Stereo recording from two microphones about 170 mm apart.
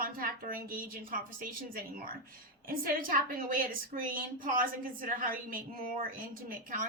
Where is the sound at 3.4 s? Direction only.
55° right (ahead or behind).